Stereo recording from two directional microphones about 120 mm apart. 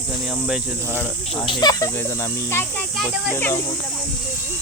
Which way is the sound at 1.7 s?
25° left (ahead or behind).